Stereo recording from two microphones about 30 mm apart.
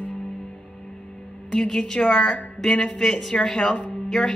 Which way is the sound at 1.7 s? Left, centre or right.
Left.